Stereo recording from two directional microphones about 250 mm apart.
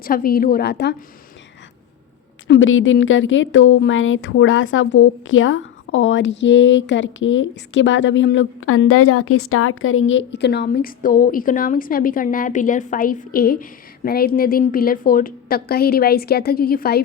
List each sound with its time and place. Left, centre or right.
0.0 s a woman's voice: left
2.5 s a woman's voice: left